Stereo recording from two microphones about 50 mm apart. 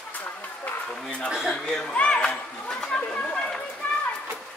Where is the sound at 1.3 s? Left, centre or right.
Centre.